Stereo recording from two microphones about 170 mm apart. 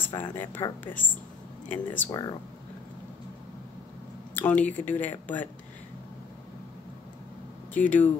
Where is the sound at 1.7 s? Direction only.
10° left (ahead or behind).